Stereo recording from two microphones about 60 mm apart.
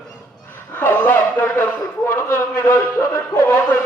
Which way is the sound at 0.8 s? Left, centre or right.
Left.